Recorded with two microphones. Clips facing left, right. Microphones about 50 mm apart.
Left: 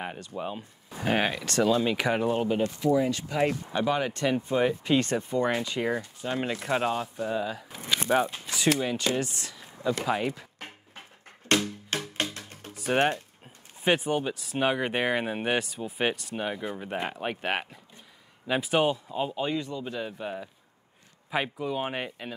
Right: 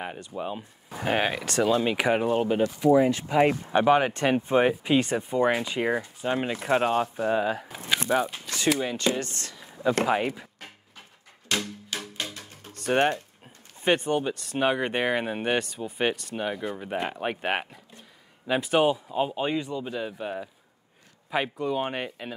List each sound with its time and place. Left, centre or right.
0.0 s speech: centre
2.8 s speech: right
3.7 s speech: right
4.8 s speech: centre
6.9 s speech: right
8.1 s speech: centre
10.6 s music: left
12.7 s speech: centre